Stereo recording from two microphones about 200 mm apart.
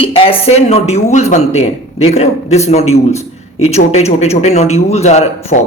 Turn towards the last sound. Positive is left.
turn(degrees=40)  # may be behind; listen again after turning